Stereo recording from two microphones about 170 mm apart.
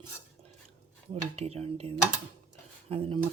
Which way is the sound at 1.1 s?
35° right (ahead or behind).